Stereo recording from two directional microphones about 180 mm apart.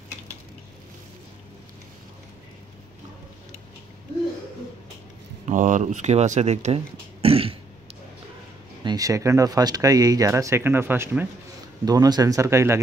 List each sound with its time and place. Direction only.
5.4 s speech: 45° right (ahead or behind)
8.8 s speech: 20° right (ahead or behind)